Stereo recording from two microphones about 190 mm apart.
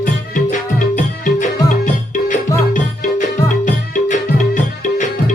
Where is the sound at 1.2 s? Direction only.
40° left (ahead or behind).